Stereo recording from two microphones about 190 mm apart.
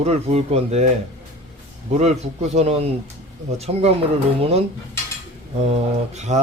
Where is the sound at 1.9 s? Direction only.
35° right (ahead or behind).